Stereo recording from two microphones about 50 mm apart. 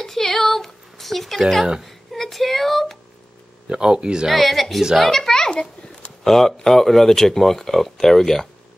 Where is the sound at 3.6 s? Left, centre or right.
Centre.